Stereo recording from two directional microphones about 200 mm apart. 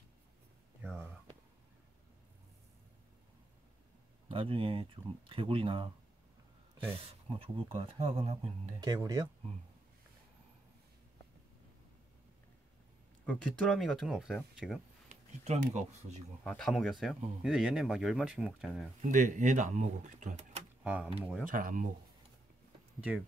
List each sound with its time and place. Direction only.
0.8 s a sound: centre (ahead or behind)
4.3 s speech: 25° right (ahead or behind)
7.2 s speech: 30° right (ahead or behind)
8.8 s speech: 20° right (ahead or behind)
13.2 s speech: 5° left (ahead or behind)
15.0 s speech: 35° right (ahead or behind)
16.4 s speech: 5° left (ahead or behind)
18.9 s speech: 40° right (ahead or behind)
20.8 s speech: 5° right (ahead or behind)
21.5 s speech: 40° right (ahead or behind)
22.9 s speech: 5° right (ahead or behind)